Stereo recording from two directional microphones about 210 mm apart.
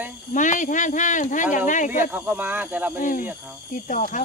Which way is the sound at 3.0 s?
40° left (ahead or behind).